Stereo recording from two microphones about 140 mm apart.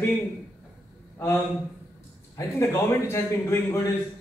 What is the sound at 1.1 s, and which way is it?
A man's voice, 15° left (ahead or behind).